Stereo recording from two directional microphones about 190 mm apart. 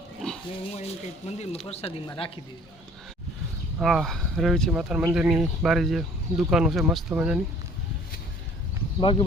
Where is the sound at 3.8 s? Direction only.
Centre (ahead or behind).